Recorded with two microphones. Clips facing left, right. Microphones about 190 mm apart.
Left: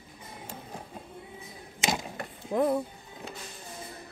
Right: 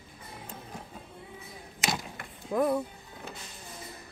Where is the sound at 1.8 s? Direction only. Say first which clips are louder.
Left 3 dB; 25° left (ahead or behind).